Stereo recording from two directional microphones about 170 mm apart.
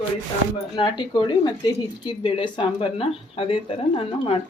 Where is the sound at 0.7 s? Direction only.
25° left (ahead or behind).